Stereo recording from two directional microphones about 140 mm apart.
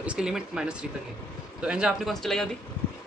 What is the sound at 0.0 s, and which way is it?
Speech, 5° right (ahead or behind).